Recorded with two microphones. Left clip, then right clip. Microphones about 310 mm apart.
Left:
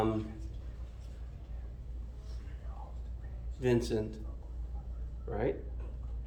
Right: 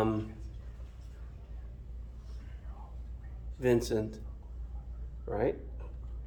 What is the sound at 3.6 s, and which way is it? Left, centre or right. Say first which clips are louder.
Speech: right 2 dB; centre.